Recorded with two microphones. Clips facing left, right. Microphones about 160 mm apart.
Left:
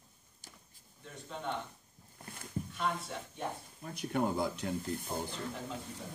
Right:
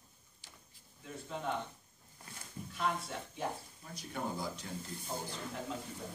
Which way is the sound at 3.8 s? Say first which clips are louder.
Left 10 dB; 65° left (ahead or behind).